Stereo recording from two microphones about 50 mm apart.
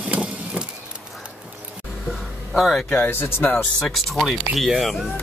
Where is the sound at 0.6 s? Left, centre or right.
Right.